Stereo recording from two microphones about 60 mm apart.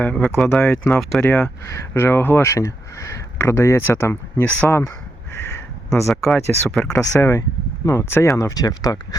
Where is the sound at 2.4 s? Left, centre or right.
Left.